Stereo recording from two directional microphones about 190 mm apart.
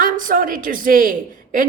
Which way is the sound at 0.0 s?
45° right (ahead or behind).